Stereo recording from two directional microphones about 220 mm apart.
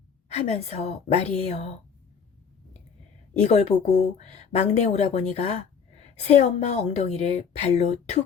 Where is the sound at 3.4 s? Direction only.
30° left (ahead or behind).